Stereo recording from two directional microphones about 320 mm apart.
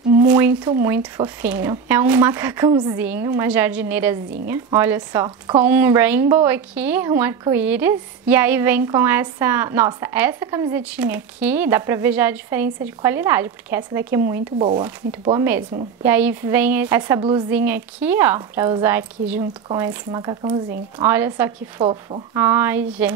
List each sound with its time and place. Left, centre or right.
0.2 s a woman's voice: centre